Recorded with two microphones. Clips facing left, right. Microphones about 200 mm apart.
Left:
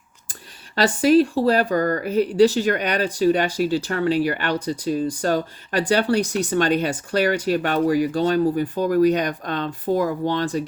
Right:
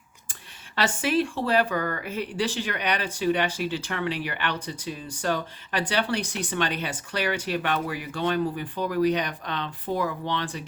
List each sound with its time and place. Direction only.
0.8 s speech: 40° left (ahead or behind)